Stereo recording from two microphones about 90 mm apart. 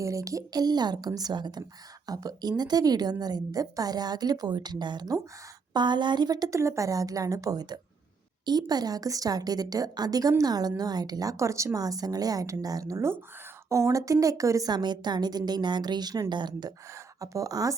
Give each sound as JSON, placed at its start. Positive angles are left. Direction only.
{"t": 0.0, "sound": "a woman's voice", "side_deg": -35}
{"t": 6.6, "sound": "a woman's voice", "side_deg": -35}
{"t": 14.7, "sound": "a woman's voice", "side_deg": -55}
{"t": 16.9, "sound": "speech", "side_deg": -40}